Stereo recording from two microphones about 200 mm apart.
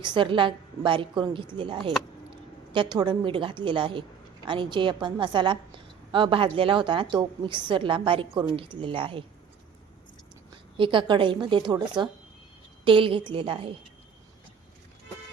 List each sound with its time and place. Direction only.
0.0 s a woman's voice: 25° right (ahead or behind)
10.8 s a woman's voice: 25° right (ahead or behind)